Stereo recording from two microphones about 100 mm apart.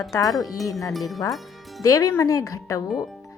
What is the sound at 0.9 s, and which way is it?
Speech, centre (ahead or behind).